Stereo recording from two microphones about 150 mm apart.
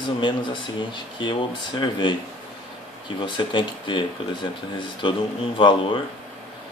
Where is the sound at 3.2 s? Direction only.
30° left (ahead or behind).